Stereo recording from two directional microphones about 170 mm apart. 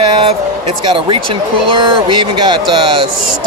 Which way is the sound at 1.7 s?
30° right (ahead or behind).